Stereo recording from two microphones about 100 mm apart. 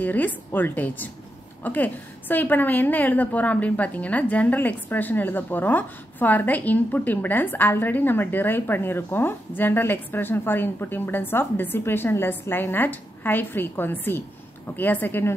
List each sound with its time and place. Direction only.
0.0 s a woman's voice: 15° left (ahead or behind)